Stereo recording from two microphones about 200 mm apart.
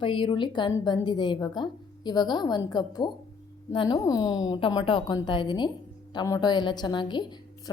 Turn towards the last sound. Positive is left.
turn(degrees=20)  # may be behind; listen again after turning